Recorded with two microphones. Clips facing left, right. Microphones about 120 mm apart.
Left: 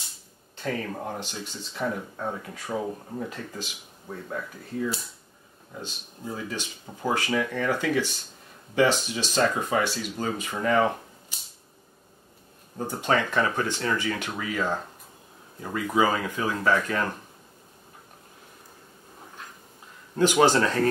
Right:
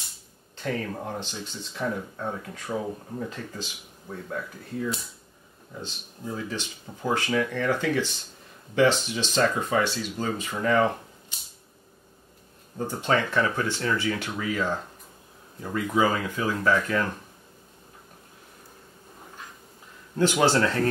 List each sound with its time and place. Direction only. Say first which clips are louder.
0.6 s speech: even; centre (ahead or behind)
12.7 s speech: even; 10° left (ahead or behind)
20.4 s speech: left 1 dB; 15° left (ahead or behind)